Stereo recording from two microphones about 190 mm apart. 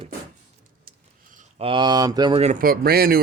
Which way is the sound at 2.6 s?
50° right (ahead or behind).